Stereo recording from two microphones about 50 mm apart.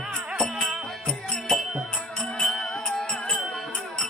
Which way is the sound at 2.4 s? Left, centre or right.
Centre.